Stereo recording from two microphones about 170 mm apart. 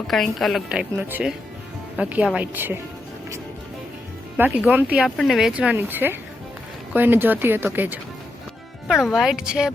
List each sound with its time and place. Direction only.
0.1 s a woman's voice: centre (ahead or behind)
4.4 s speech: 10° right (ahead or behind)
8.9 s a woman's voice: centre (ahead or behind)